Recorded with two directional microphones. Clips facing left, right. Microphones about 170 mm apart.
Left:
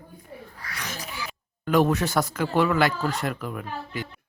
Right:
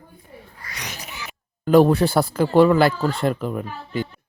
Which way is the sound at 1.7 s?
35° right (ahead or behind).